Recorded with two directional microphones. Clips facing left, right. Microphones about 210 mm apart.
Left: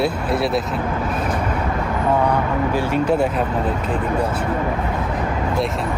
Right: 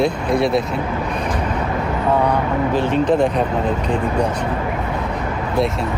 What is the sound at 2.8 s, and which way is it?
Speech, 10° left (ahead or behind).